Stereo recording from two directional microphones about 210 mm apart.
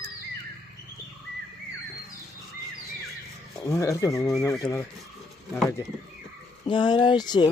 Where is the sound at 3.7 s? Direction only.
15° left (ahead or behind).